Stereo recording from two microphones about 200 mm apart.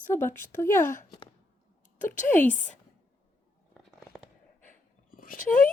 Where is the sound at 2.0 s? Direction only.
10° left (ahead or behind).